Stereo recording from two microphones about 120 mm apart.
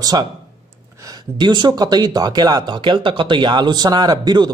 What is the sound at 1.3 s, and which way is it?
Speech, 40° right (ahead or behind).